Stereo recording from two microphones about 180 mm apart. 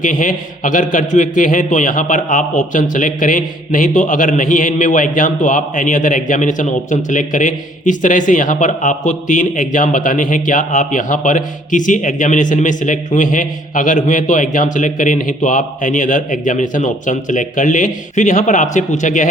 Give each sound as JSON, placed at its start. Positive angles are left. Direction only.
{"t": 0.0, "sound": "a man's voice", "side_deg": 45}